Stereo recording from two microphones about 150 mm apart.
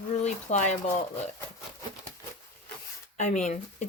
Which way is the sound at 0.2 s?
50° left (ahead or behind).